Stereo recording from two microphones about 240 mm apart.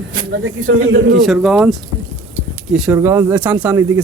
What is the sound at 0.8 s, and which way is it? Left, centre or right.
Speech, right.